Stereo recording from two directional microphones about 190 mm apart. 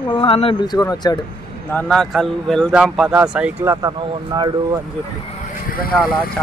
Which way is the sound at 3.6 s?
20° right (ahead or behind).